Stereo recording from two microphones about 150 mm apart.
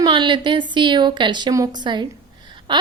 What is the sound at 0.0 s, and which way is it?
A woman's voice, 30° right (ahead or behind).